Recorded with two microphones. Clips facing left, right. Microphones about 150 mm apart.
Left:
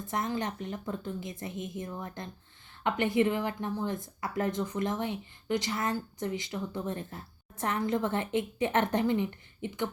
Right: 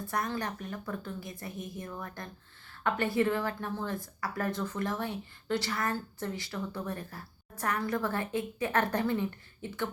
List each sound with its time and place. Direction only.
0.0 s a woman's voice: 20° left (ahead or behind)